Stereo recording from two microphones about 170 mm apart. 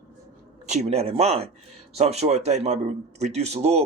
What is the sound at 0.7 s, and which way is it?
Speech, 40° right (ahead or behind).